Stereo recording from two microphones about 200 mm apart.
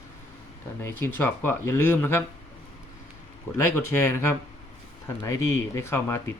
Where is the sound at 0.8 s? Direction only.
10° left (ahead or behind).